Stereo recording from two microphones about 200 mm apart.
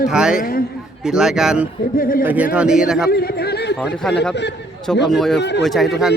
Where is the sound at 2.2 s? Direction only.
10° right (ahead or behind).